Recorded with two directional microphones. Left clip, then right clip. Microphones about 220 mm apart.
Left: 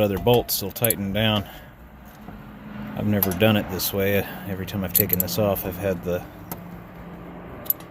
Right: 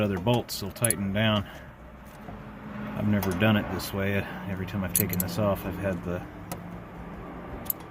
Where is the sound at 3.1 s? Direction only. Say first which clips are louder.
Left 5 dB; 40° left (ahead or behind).